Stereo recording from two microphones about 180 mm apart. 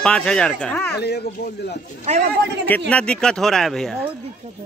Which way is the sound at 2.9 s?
5° left (ahead or behind).